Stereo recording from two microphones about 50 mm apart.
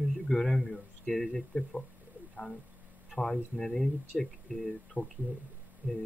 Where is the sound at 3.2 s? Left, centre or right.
Centre.